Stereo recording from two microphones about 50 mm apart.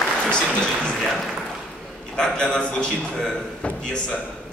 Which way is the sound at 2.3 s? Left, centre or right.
Centre.